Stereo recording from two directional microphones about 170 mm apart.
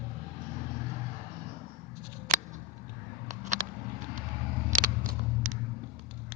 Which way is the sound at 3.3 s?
45° right (ahead or behind).